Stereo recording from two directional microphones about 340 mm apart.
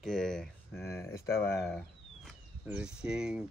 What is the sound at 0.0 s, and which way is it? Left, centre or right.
Speech, centre.